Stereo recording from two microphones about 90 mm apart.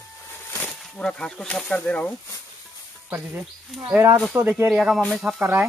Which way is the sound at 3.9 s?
20° right (ahead or behind).